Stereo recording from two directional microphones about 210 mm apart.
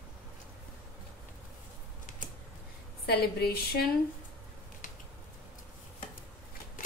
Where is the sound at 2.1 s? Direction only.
40° left (ahead or behind).